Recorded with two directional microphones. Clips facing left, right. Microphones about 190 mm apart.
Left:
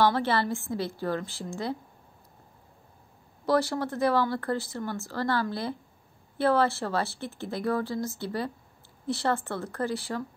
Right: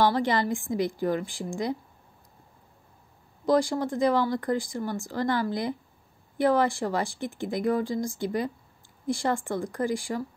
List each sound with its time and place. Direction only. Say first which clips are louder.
0.0 s speech: right 1 dB; 15° right (ahead or behind)
3.4 s speech: right 2 dB; 15° right (ahead or behind)